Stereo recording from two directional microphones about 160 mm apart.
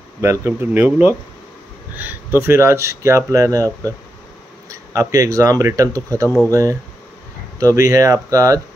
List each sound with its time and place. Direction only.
0.2 s speech: 15° right (ahead or behind)